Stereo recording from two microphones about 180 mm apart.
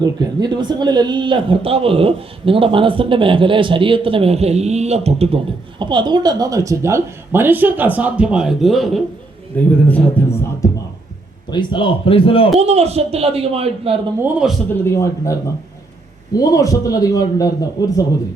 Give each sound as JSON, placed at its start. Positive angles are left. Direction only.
{"t": 0.0, "sound": "a man's voice", "side_deg": -20}
{"t": 11.5, "sound": "speech", "side_deg": 30}
{"t": 12.5, "sound": "a man's voice", "side_deg": -35}
{"t": 14.2, "sound": "speech", "side_deg": -5}
{"t": 14.8, "sound": "a man's voice", "side_deg": 15}